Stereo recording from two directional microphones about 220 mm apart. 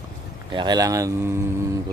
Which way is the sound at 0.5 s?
20° right (ahead or behind).